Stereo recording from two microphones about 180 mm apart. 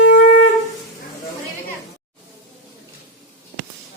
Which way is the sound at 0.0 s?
75° left (ahead or behind).